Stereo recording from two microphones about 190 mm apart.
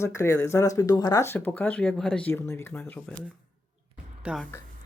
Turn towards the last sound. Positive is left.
turn(degrees=-5)  # may be behind; listen again after turning